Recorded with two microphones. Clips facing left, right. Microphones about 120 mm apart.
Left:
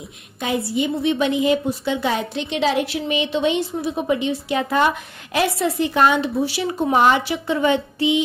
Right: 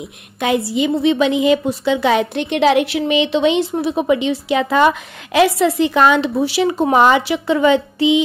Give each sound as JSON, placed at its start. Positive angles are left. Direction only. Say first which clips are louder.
{"t": 0.4, "sound": "a woman's voice", "louder": "right 5 dB", "side_deg": -90}